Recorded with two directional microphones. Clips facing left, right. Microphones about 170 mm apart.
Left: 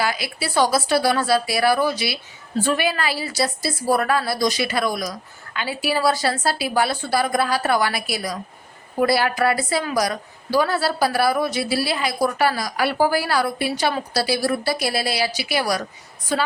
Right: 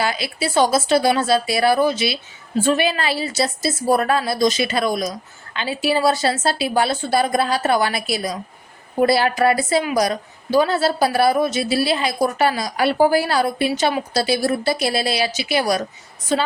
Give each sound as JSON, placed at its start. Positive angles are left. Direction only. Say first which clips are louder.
{"t": 0.0, "sound": "a woman's voice", "louder": "right 2 dB", "side_deg": -25}